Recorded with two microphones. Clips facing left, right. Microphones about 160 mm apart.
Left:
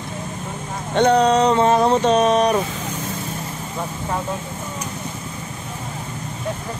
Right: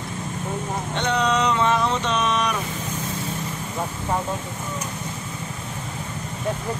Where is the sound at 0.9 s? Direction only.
40° left (ahead or behind).